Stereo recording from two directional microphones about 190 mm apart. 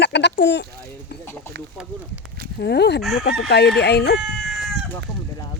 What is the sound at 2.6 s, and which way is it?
Speech, 60° left (ahead or behind).